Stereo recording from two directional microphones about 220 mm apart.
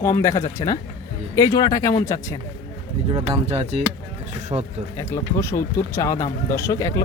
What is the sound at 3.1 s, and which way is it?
Speech, 25° right (ahead or behind).